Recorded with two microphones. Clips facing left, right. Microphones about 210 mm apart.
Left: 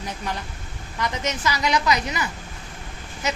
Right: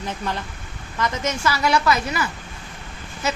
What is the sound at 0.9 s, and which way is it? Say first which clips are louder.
A woman's voice: right 2 dB; 15° left (ahead or behind).